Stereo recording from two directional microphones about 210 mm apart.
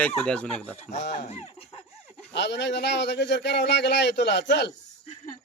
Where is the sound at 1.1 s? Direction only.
30° left (ahead or behind).